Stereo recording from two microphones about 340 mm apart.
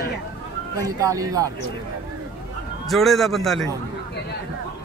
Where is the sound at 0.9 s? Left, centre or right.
Centre.